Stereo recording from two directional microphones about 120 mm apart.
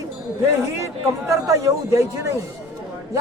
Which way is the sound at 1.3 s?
25° right (ahead or behind).